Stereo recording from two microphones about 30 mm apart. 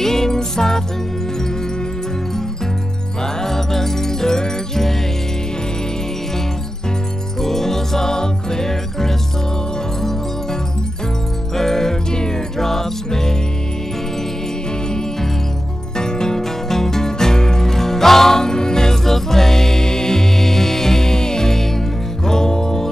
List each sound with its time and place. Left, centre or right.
0.0 s music: centre
3.4 s music: centre
7.4 s music: centre
11.5 s music: centre
12.5 s music: centre
16.0 s music: left